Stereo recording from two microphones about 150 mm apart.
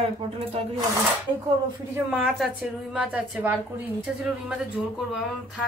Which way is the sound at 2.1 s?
5° right (ahead or behind).